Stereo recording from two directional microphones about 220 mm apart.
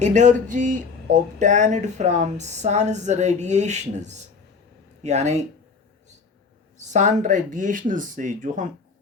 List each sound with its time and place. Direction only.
0.0 s speech: 35° right (ahead or behind)
6.7 s speech: 35° right (ahead or behind)